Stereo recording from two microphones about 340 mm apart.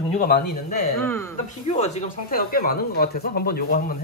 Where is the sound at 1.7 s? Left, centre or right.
Centre.